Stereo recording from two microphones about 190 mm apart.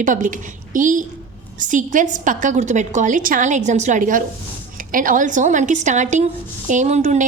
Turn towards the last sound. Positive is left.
turn(degrees=-35)  # may be behind; listen again after turning